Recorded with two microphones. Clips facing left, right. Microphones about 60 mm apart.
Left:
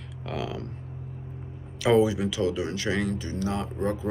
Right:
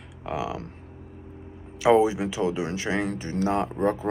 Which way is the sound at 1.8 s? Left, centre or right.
Right.